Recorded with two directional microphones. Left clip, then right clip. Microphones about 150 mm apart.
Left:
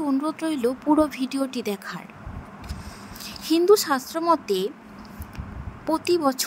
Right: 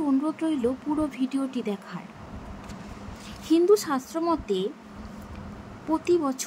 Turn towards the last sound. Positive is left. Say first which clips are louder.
# left 2 dB
turn(degrees=50)  # may be behind; listen again after turning